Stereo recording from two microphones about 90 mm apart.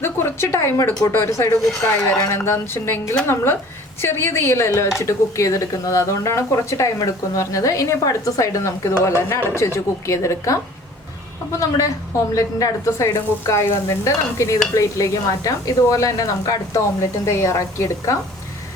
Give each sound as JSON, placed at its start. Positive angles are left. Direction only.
{"t": 0.0, "sound": "a woman's voice", "side_deg": 30}
{"t": 12.3, "sound": "speech", "side_deg": 40}